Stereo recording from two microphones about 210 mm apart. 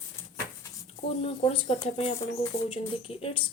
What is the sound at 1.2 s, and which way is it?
Speech, 30° left (ahead or behind).